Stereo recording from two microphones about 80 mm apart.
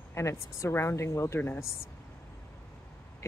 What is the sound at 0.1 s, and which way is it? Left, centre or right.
Speech, left.